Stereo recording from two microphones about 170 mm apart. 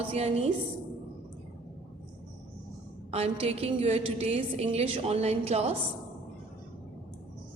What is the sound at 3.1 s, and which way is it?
A woman's voice, 35° right (ahead or behind).